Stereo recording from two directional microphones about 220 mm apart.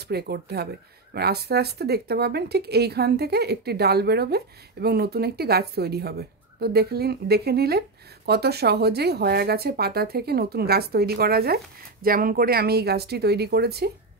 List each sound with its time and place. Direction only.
0.0 s speech: 45° right (ahead or behind)